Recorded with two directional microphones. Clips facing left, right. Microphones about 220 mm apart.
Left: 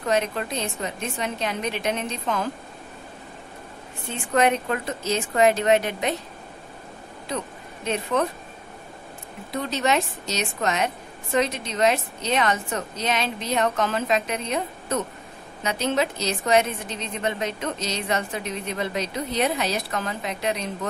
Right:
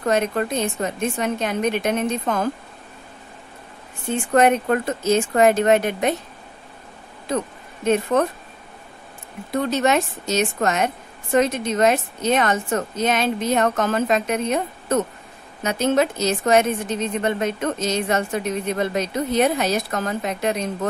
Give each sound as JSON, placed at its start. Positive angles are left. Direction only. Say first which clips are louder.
{"t": 0.0, "sound": "a woman's voice", "louder": "right 4 dB", "side_deg": -50}
{"t": 4.3, "sound": "a woman's voice", "louder": "right 4 dB", "side_deg": -50}
{"t": 7.8, "sound": "a woman's voice", "louder": "right 6 dB", "side_deg": -50}
{"t": 9.5, "sound": "a woman's voice", "louder": "right 5 dB", "side_deg": -50}